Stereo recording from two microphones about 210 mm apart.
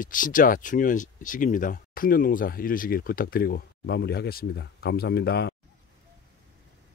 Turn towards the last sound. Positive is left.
turn(degrees=50)  # may be behind; listen again after turning